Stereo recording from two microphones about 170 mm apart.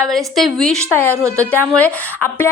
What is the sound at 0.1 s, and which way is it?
Speech, centre (ahead or behind).